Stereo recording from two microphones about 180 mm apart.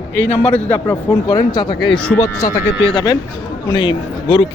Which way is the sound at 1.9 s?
5° left (ahead or behind).